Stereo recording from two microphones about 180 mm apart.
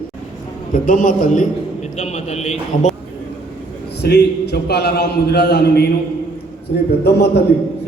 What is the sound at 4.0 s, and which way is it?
A man's voice, 65° left (ahead or behind).